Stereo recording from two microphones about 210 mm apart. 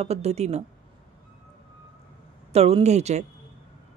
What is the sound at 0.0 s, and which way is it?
Speech, 30° right (ahead or behind).